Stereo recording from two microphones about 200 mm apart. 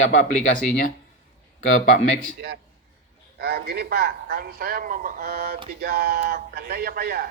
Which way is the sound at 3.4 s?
50° right (ahead or behind).